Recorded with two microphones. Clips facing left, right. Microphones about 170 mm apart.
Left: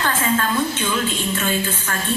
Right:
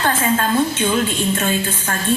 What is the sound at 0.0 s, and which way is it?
A woman's voice, 30° right (ahead or behind).